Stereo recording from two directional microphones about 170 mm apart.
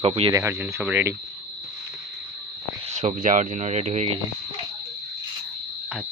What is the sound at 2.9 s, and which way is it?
Speech, 45° right (ahead or behind).